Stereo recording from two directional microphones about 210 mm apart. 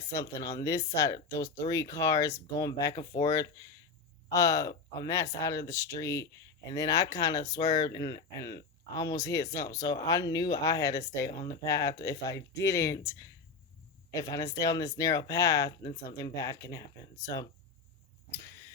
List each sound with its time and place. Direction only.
0.3 s speech: 15° left (ahead or behind)